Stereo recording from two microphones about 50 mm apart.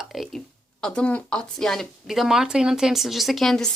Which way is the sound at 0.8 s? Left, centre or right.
Left.